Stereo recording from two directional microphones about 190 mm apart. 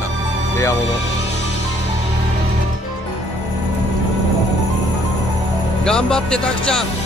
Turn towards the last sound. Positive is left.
turn(degrees=5)  # may be behind; listen again after turning